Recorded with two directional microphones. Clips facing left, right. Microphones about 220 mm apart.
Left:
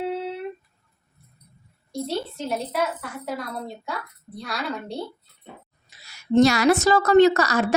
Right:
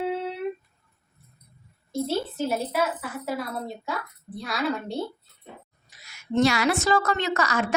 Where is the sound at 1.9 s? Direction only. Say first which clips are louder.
Right 1 dB; 5° right (ahead or behind).